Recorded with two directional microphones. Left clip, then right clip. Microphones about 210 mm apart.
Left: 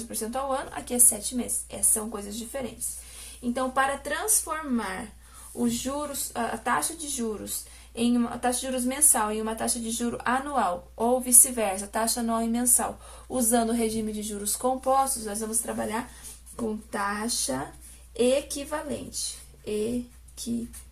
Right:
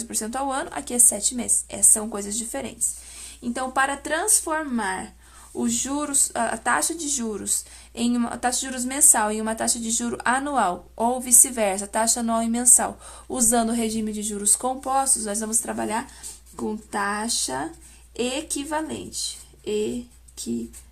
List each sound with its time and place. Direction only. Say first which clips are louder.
0.1 s a woman's voice: right 2 dB; 40° right (ahead or behind)